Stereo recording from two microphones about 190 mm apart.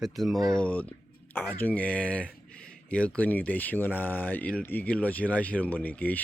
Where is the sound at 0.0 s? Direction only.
Centre (ahead or behind).